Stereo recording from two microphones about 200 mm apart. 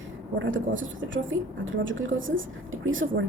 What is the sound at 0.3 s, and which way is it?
A woman's voice, 70° right (ahead or behind).